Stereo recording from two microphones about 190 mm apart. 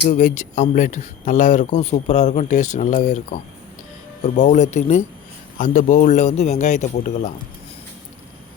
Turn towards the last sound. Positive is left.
turn(degrees=40)  # may be behind; listen again after turning